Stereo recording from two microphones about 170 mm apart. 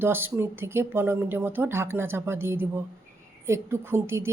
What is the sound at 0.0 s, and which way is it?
A woman's voice, 10° right (ahead or behind).